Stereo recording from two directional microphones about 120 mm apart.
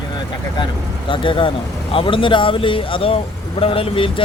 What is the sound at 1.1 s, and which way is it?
Speech, 45° left (ahead or behind).